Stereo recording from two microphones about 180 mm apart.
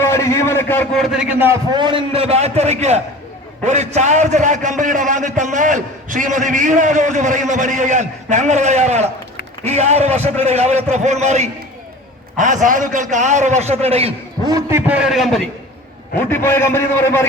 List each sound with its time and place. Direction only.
0.0 s a man's voice: 15° left (ahead or behind)
0.9 s a man's voice: centre (ahead or behind)
1.7 s a man's voice: 25° right (ahead or behind)
14.4 s a man's voice: 20° right (ahead or behind); by 15.4 s centre (ahead or behind)
16.3 s a man's voice: 10° left (ahead or behind)